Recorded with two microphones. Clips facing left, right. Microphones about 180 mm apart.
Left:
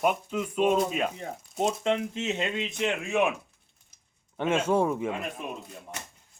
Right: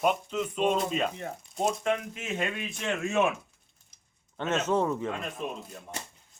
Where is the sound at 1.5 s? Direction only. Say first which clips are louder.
Left 2 dB; 20° left (ahead or behind).